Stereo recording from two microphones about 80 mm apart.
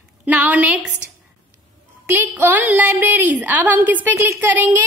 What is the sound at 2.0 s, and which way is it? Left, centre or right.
A woman's voice, right.